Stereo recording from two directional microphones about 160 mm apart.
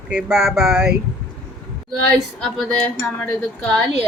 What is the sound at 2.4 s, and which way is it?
Speech, 5° left (ahead or behind).